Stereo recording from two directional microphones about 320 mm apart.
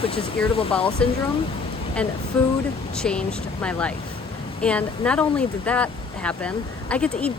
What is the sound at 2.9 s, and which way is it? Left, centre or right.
Speech, centre.